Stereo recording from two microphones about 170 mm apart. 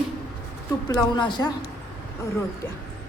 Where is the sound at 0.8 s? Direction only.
25° left (ahead or behind).